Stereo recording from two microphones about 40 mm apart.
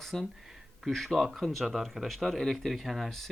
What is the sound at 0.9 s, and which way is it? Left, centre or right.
Speech, centre.